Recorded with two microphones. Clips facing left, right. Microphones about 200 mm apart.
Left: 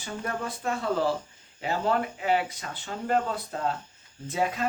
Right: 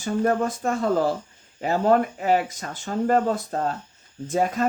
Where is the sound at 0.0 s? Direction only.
45° right (ahead or behind).